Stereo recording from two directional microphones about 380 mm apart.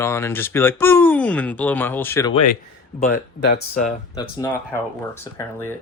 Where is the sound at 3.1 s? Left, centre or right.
Left.